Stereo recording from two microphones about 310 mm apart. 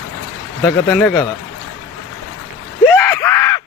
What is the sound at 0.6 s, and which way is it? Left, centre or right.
Speech, centre.